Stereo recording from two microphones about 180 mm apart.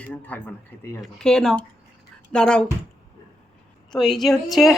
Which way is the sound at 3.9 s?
Centre (ahead or behind).